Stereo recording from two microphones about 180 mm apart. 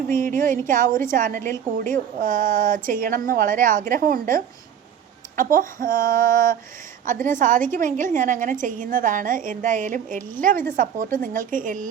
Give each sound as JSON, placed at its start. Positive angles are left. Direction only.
{"t": 0.1, "sound": "a woman's voice", "side_deg": -50}